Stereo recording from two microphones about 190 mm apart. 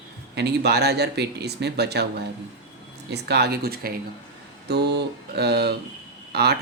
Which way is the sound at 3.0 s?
60° right (ahead or behind).